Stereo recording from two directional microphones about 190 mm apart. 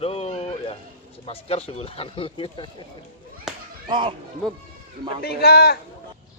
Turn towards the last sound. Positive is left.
turn(degrees=55)  # may be behind; listen again after turning